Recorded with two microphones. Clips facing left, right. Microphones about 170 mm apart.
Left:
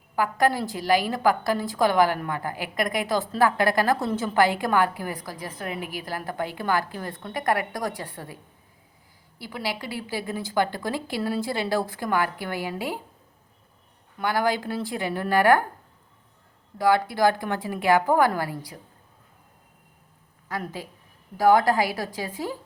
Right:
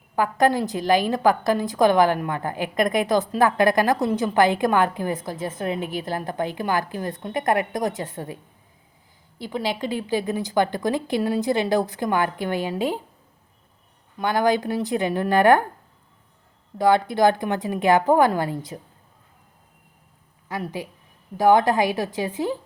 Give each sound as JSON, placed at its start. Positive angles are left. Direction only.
{"t": 0.2, "sound": "a woman's voice", "side_deg": -20}
{"t": 9.4, "sound": "a woman's voice", "side_deg": -20}
{"t": 14.2, "sound": "a woman's voice", "side_deg": -20}
{"t": 16.7, "sound": "a woman's voice", "side_deg": -20}
{"t": 20.5, "sound": "a woman's voice", "side_deg": -15}